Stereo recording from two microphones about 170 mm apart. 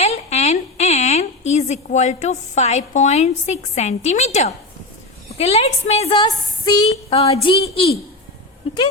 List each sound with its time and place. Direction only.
0.0 s a woman's voice: 40° left (ahead or behind)
6.1 s a sound: 25° left (ahead or behind)
6.8 s a woman's voice: 35° left (ahead or behind)